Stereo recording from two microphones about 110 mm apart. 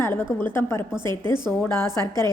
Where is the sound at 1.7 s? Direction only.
35° right (ahead or behind).